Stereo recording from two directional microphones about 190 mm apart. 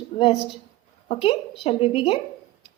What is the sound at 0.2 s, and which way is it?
A woman's voice, 25° left (ahead or behind).